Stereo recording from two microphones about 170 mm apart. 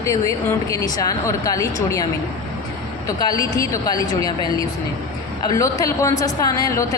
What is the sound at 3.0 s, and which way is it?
A woman's voice, 20° left (ahead or behind).